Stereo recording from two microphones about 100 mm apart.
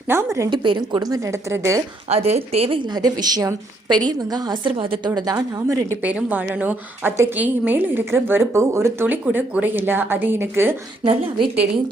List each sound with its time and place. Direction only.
0.1 s a woman's voice: 30° right (ahead or behind)
0.5 s a woman's voice: 50° right (ahead or behind); by 1.8 s 30° right (ahead or behind)
2.0 s a woman's voice: 90° right; by 2.8 s 75° right (ahead or behind)
2.9 s a woman's voice: 40° right (ahead or behind)
4.8 s a woman's voice: 50° right (ahead or behind); by 6.0 s 35° right (ahead or behind)
6.0 s a woman's voice: 15° right (ahead or behind)
11.0 s a woman's voice: 70° right (ahead or behind)